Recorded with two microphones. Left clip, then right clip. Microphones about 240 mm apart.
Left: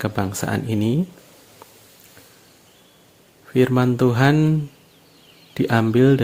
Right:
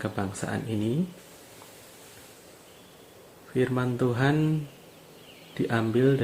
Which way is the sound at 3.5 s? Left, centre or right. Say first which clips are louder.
Left 9 dB; left.